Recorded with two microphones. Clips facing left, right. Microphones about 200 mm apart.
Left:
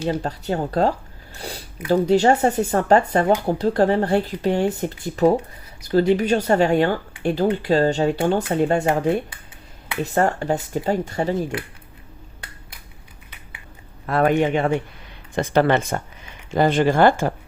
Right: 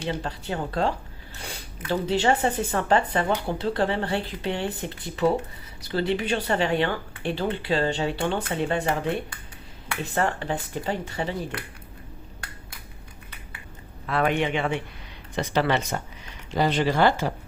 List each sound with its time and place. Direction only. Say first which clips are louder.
0.1 s speech: left 5 dB; 40° left (ahead or behind)
14.1 s speech: left 6 dB; 45° left (ahead or behind)